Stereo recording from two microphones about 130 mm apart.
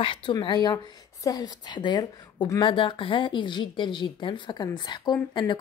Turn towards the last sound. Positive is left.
turn(degrees=35)  # may be behind; listen again after turning